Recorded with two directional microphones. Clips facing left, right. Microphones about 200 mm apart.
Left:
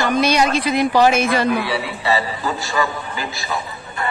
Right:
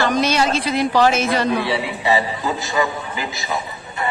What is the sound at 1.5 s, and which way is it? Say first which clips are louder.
A man's voice: right 1 dB; 25° right (ahead or behind).